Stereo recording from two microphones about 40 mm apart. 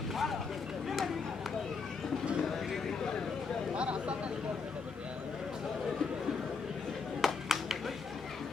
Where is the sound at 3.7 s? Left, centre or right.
Right.